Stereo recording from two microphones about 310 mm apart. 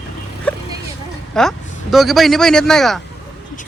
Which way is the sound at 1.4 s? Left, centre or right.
Centre.